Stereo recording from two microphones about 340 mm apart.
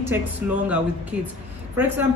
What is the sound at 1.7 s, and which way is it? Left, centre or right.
Speech, centre.